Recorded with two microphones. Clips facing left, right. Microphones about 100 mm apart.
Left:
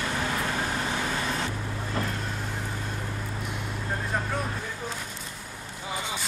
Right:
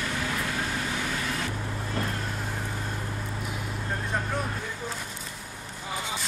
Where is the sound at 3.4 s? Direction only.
Centre (ahead or behind).